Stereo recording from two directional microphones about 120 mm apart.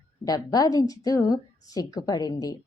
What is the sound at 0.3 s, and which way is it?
A woman's voice, 30° left (ahead or behind).